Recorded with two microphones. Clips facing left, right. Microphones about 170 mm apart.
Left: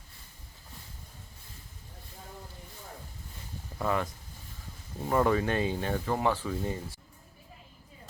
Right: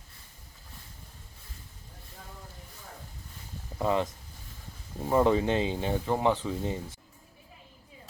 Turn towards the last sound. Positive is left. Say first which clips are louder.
# right 1 dB
turn(degrees=-20)  # may be behind; listen again after turning